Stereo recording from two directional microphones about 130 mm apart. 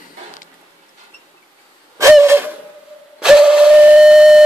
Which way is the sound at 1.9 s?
20° right (ahead or behind).